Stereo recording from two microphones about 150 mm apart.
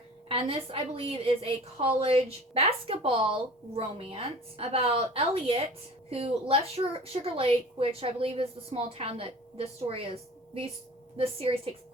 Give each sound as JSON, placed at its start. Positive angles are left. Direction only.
{"t": 0.3, "sound": "a woman's voice", "side_deg": -40}
{"t": 11.2, "sound": "a woman's voice", "side_deg": -40}